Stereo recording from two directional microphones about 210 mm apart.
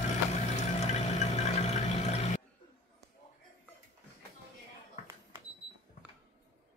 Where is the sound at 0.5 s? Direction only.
35° left (ahead or behind).